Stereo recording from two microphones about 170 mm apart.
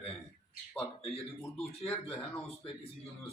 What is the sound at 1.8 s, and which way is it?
Speech, 5° left (ahead or behind).